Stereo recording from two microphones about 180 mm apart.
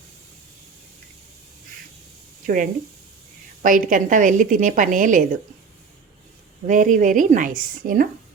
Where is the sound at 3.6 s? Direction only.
50° right (ahead or behind).